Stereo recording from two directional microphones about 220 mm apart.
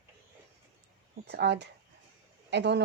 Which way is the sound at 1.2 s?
50° right (ahead or behind).